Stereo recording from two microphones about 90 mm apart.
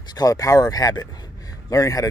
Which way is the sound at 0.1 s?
40° left (ahead or behind).